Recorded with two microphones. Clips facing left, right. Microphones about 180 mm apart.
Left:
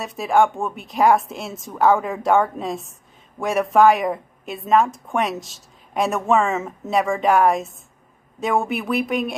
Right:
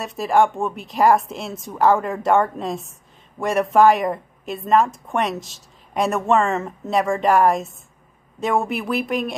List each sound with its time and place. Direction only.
0.0 s speech: centre (ahead or behind)